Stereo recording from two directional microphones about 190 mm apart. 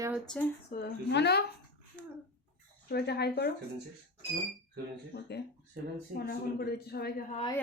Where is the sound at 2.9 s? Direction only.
60° left (ahead or behind).